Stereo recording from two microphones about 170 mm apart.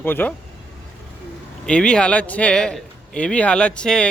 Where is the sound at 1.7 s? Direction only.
5° left (ahead or behind).